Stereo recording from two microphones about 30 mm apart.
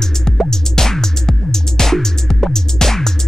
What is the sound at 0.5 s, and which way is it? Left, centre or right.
Music, centre.